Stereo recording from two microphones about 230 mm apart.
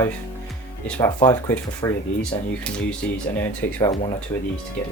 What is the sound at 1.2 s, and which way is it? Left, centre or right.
Speech, centre.